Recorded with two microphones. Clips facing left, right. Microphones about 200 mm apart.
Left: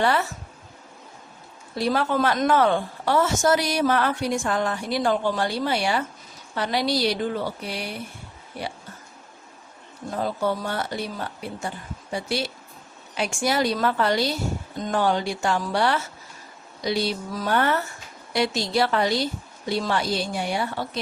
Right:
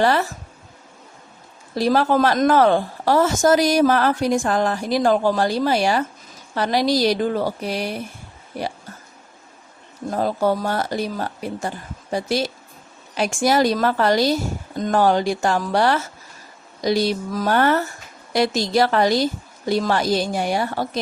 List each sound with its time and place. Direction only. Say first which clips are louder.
0.0 s a woman's voice: right 4 dB; 40° right (ahead or behind)
1.7 s a woman's voice: right 5 dB; 40° right (ahead or behind)
10.1 s a woman's voice: right 5 dB; 40° right (ahead or behind)